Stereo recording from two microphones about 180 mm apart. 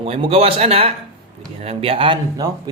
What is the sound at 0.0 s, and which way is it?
A man's voice, 30° right (ahead or behind).